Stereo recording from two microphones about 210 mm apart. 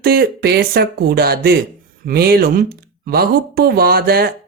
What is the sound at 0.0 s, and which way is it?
Speech, 45° right (ahead or behind).